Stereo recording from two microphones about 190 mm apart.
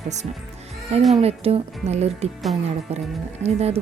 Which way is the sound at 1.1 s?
35° right (ahead or behind).